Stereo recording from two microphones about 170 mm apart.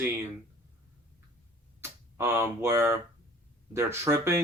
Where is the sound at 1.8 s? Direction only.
15° right (ahead or behind).